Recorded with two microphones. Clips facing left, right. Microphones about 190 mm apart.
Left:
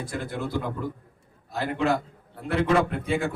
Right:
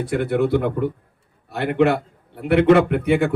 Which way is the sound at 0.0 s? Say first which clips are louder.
Right 11 dB; 65° right (ahead or behind).